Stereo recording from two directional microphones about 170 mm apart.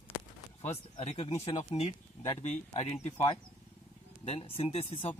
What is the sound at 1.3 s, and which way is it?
Speech, 25° left (ahead or behind).